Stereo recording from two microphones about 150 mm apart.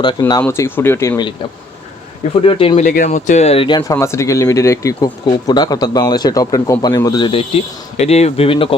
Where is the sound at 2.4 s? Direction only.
35° left (ahead or behind).